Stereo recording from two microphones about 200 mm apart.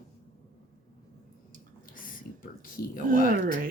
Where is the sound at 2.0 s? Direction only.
45° left (ahead or behind).